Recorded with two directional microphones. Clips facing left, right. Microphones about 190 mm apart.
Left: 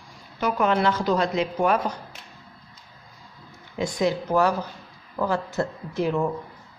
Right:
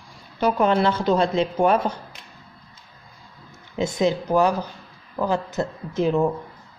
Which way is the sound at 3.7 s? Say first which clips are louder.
Right 2 dB; 25° right (ahead or behind).